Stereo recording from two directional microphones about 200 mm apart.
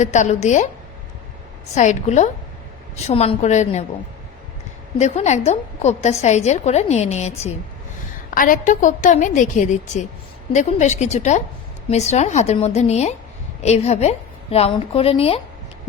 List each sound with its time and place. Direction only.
0.0 s a woman's voice: 35° left (ahead or behind)
1.7 s a woman's voice: 35° left (ahead or behind)
4.9 s a woman's voice: 35° left (ahead or behind)